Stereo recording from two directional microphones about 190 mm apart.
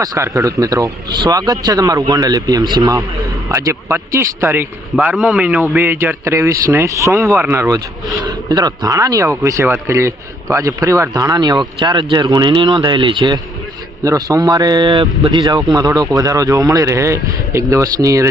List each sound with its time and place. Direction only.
0.0 s a man's voice: 15° right (ahead or behind)